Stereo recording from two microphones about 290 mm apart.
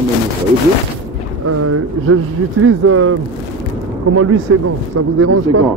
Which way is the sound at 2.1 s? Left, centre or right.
Right.